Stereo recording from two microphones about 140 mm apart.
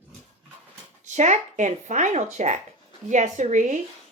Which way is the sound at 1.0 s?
60° right (ahead or behind).